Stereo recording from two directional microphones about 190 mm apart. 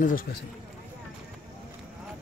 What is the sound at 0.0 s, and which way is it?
Speech, 50° left (ahead or behind).